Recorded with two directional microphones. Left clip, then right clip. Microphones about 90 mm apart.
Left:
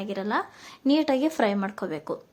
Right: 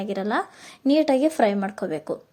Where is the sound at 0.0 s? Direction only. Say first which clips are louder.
Right 3 dB; 45° right (ahead or behind).